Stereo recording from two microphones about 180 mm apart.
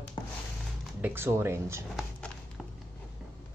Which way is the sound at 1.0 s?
15° right (ahead or behind).